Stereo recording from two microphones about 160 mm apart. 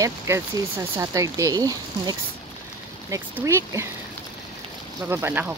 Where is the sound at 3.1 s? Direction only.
20° right (ahead or behind).